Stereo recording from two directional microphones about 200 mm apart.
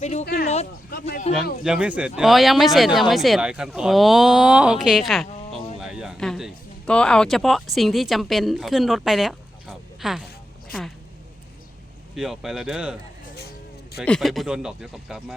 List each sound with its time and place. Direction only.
0.0 s speech: 35° left (ahead or behind)
0.9 s speech: 50° left (ahead or behind)
1.6 s speech: 5° right (ahead or behind)
10.7 s a sound: centre (ahead or behind)
12.1 s speech: centre (ahead or behind)
13.2 s vehicle: 50° left (ahead or behind)
14.0 s speech: 5° left (ahead or behind)